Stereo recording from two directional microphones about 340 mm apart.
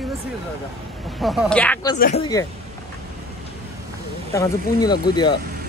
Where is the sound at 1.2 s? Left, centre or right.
Centre.